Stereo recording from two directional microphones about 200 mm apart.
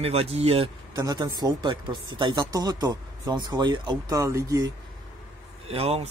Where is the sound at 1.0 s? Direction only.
20° right (ahead or behind).